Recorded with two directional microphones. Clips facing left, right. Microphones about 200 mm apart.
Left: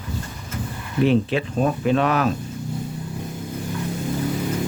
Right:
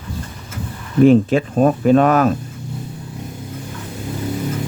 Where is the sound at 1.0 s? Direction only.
45° right (ahead or behind).